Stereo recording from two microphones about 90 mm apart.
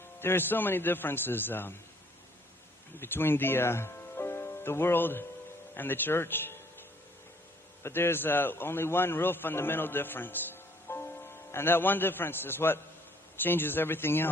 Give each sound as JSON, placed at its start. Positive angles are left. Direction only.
{"t": 0.2, "sound": "a man's voice", "side_deg": 25}
{"t": 3.0, "sound": "a man's voice", "side_deg": 25}
{"t": 7.8, "sound": "a man's voice", "side_deg": 30}